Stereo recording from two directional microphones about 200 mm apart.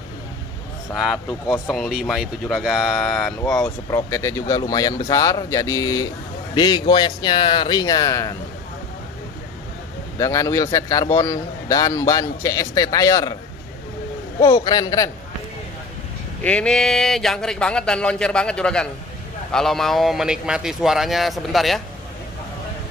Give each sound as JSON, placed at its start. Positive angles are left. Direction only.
{"t": 0.9, "sound": "speech", "side_deg": 0}
{"t": 3.6, "sound": "speech", "side_deg": 15}
{"t": 10.1, "sound": "speech", "side_deg": 15}
{"t": 14.4, "sound": "speech", "side_deg": 20}
{"t": 16.4, "sound": "speech", "side_deg": 5}